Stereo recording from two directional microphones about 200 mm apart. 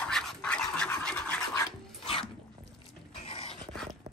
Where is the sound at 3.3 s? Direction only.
30° left (ahead or behind).